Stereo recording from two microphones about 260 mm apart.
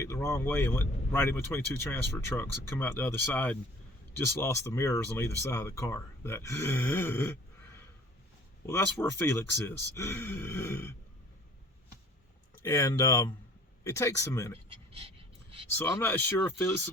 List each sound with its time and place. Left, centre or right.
0.0 s speech: centre
12.6 s speech: centre
14.9 s dog: right
15.8 s speech: centre